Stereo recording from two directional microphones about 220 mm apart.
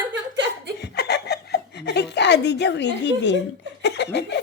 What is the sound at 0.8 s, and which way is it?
Chuckle, 50° left (ahead or behind).